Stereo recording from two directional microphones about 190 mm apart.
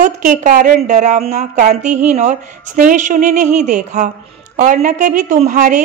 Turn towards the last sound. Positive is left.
turn(degrees=-40)  # may be behind; listen again after turning